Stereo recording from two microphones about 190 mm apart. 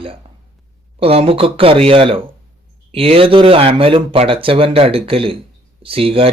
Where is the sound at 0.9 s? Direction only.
30° right (ahead or behind).